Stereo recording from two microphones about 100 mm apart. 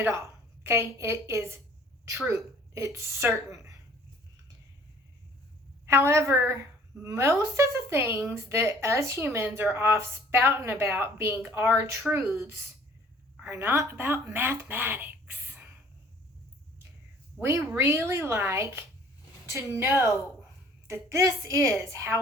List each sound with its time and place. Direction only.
0.0 s a woman's voice: 25° right (ahead or behind)
5.9 s a woman's voice: 30° right (ahead or behind)
17.4 s a woman's voice: 30° right (ahead or behind)